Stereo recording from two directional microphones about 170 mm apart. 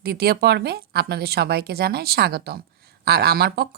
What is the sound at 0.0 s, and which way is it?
A woman's voice, 65° right (ahead or behind).